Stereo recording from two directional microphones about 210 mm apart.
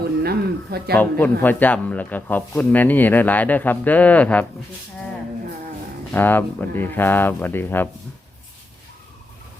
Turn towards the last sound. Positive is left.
turn(degrees=10)  # may be behind; listen again after turning